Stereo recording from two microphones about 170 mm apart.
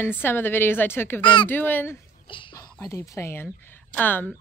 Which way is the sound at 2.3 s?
30° left (ahead or behind).